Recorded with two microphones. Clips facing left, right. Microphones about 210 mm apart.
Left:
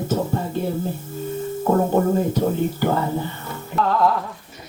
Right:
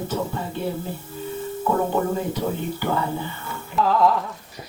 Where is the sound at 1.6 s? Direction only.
40° left (ahead or behind).